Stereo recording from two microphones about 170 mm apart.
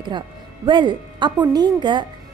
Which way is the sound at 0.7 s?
25° right (ahead or behind).